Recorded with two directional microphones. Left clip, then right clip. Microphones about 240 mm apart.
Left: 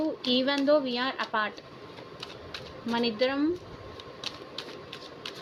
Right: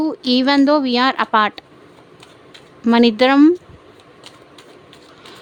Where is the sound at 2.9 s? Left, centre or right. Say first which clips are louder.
Right 15 dB; right.